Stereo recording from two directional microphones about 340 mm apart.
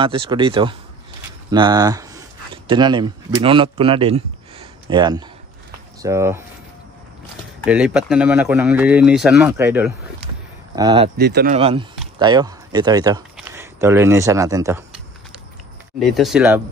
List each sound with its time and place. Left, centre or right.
0.0 s speech: centre
7.6 s speech: centre
11.1 s speech: right
11.5 s speech: centre
16.0 s speech: centre